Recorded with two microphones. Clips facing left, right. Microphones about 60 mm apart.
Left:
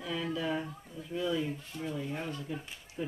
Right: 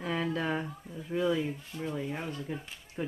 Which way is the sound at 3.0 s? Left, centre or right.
Right.